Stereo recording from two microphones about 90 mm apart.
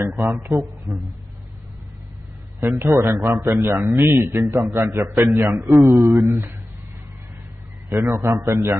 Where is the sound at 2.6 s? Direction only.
30° right (ahead or behind).